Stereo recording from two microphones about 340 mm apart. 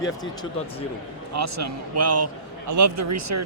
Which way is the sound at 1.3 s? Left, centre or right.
Right.